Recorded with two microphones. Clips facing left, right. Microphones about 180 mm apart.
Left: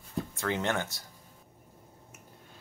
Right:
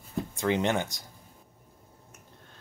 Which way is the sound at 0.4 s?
20° right (ahead or behind).